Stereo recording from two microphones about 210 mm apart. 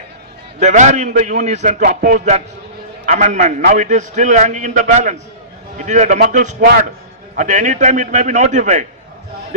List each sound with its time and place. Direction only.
0.6 s a man's voice: 35° right (ahead or behind)
6.6 s a man's voice: 50° right (ahead or behind)
7.3 s a man's voice: 35° right (ahead or behind)